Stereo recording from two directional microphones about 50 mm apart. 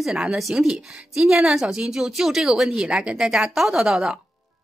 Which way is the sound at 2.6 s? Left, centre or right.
Centre.